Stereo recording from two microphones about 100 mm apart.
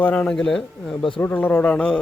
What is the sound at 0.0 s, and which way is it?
Speech, 15° left (ahead or behind).